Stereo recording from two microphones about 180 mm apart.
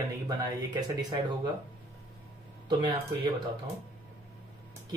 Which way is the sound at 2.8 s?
25° right (ahead or behind).